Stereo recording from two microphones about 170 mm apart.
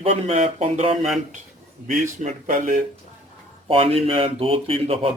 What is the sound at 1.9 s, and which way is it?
Speech, 50° right (ahead or behind).